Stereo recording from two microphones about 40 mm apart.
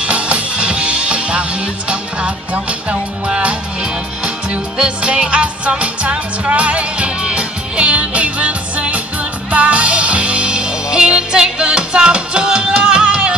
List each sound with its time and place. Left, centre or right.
0.0 s music: right
4.2 s music: right